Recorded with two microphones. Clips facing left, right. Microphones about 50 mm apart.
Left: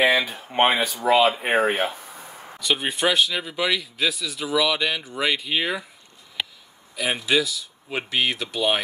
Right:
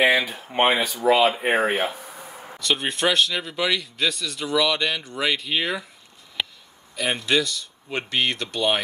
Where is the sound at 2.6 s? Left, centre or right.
Centre.